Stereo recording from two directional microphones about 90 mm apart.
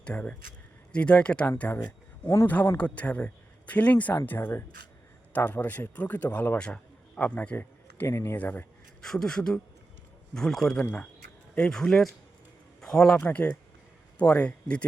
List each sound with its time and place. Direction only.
0.0 s speech: 15° left (ahead or behind)
2.2 s speech: 35° left (ahead or behind)
2.7 s a man's voice: 15° left (ahead or behind)
8.0 s speech: 30° left (ahead or behind)
8.4 s speech: 20° left (ahead or behind)
9.0 s a man's voice: 5° left (ahead or behind)
12.8 s a sound: 5° left (ahead or behind)
13.1 s speech: 15° left (ahead or behind)